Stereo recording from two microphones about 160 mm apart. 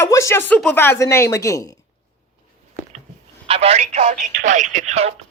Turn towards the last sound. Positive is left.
turn(degrees=-45)  # may be behind; listen again after turning